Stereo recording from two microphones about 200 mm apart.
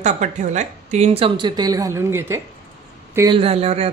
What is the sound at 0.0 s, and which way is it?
Speech, 40° right (ahead or behind).